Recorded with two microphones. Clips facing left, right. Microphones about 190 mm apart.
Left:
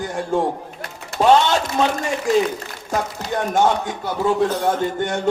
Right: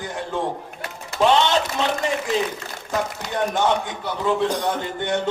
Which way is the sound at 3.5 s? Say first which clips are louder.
Left 6 dB; 45° left (ahead or behind).